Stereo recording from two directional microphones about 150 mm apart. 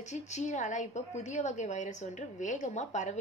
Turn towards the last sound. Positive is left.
turn(degrees=50)  # may be behind; listen again after turning